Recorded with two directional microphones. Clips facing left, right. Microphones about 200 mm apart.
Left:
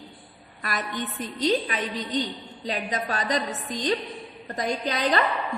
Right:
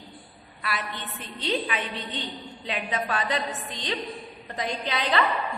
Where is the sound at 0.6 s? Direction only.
45° left (ahead or behind).